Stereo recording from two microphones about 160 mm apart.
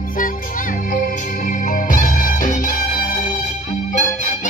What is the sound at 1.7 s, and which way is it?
Music, 55° left (ahead or behind).